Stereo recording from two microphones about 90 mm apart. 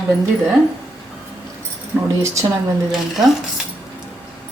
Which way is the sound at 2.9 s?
5° right (ahead or behind).